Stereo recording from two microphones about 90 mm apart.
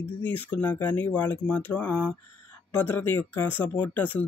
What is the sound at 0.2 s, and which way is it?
Speech, 20° left (ahead or behind).